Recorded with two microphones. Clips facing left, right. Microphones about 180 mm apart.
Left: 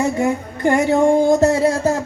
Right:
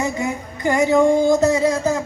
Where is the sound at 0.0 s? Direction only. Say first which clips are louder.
Left 5 dB; 60° left (ahead or behind).